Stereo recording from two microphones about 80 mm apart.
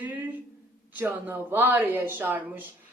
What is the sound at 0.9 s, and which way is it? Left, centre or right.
A woman's voice, centre.